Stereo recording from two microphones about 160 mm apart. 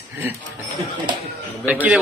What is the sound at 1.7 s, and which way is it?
Speech, 10° right (ahead or behind).